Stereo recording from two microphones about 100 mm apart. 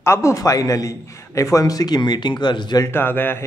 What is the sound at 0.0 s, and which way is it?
A man's voice, 30° left (ahead or behind).